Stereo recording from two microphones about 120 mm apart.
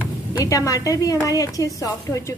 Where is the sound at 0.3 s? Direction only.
30° left (ahead or behind).